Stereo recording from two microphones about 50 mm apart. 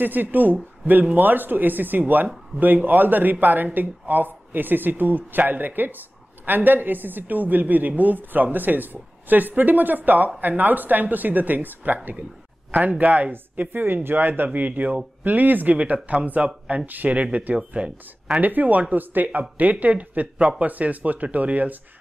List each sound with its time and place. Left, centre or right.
0.0 s speech: right
13.3 s speech: right
17.7 s speech: centre
18.4 s speech: right